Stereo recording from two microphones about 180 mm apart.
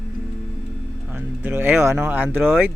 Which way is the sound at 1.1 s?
10° right (ahead or behind).